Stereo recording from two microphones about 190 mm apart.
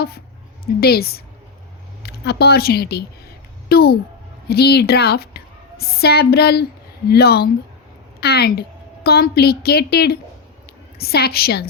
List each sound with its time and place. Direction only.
0.8 s a woman's voice: 55° left (ahead or behind)